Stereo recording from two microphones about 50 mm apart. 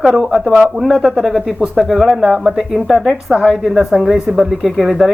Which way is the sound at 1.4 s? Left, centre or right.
Centre.